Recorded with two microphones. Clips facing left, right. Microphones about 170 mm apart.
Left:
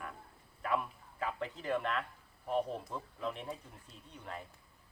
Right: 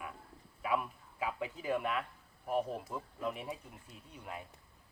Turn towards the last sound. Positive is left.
turn(degrees=-10)  # may be behind; listen again after turning